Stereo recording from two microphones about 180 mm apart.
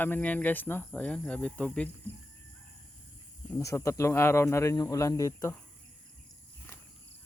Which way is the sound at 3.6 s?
15° left (ahead or behind).